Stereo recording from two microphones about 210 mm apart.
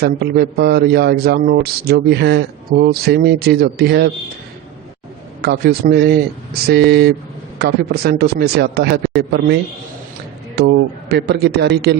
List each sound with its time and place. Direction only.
0.0 s a man's voice: 50° right (ahead or behind)
5.4 s a man's voice: 50° right (ahead or behind)